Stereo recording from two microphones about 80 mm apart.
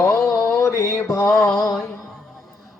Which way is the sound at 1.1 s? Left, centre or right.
Left.